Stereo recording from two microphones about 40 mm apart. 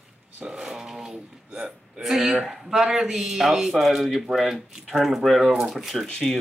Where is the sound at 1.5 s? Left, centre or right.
Right.